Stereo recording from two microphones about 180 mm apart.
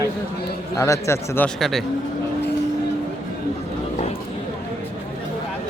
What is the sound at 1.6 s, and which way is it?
Speech, centre (ahead or behind).